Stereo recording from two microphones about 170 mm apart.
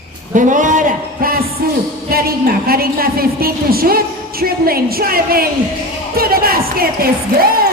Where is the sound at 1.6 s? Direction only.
60° right (ahead or behind).